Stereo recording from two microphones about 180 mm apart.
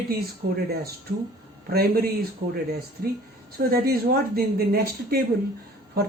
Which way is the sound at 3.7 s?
55° right (ahead or behind).